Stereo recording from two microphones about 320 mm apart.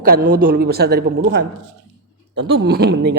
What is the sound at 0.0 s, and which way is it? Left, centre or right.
A man's voice, right.